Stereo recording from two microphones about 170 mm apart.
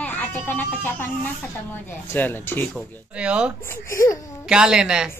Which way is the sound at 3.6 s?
15° left (ahead or behind).